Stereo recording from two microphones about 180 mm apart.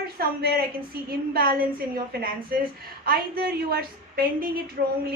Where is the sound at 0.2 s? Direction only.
60° right (ahead or behind).